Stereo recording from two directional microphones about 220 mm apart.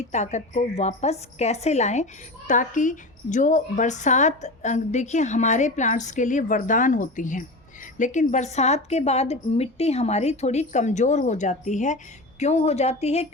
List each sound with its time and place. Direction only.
0.1 s a woman's voice: 30° left (ahead or behind)